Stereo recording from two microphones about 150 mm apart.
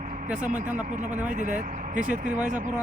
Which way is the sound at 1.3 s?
60° right (ahead or behind).